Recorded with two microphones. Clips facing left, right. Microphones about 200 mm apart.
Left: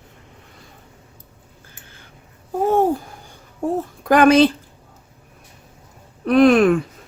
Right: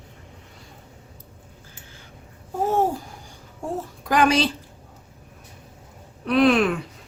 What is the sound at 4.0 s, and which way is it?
Speech, 55° left (ahead or behind).